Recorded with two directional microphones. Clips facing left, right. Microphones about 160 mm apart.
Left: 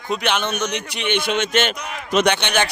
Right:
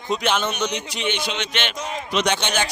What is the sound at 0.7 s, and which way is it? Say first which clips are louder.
Speech: left 3 dB; 60° left (ahead or behind).